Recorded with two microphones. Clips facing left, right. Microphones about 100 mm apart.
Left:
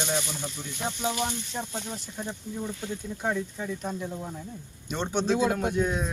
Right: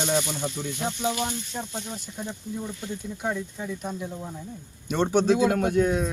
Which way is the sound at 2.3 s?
Centre (ahead or behind).